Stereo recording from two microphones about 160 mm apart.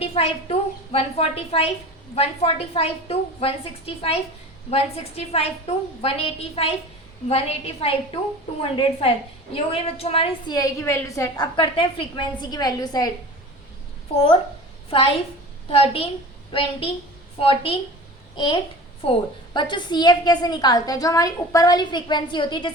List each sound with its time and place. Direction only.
0.0 s a woman's voice: 40° left (ahead or behind)
10.5 s a woman's voice: 20° left (ahead or behind)
11.5 s a woman's voice: 30° left (ahead or behind)
14.8 s a woman's voice: 35° left (ahead or behind)